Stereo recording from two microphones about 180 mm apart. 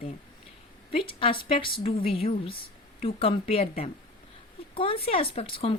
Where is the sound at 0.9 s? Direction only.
30° left (ahead or behind).